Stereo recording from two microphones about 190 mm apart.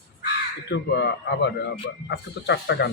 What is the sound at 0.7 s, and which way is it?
A man's voice, 65° left (ahead or behind).